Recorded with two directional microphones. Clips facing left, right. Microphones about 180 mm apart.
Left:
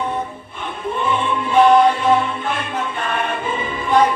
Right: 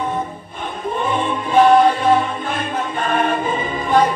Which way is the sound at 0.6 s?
45° right (ahead or behind).